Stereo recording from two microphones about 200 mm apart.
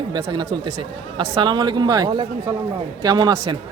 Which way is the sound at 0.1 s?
25° right (ahead or behind).